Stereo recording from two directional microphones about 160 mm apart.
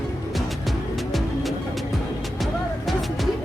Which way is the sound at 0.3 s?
Centre (ahead or behind).